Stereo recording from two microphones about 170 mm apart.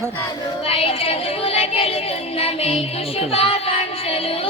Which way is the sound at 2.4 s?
35° left (ahead or behind).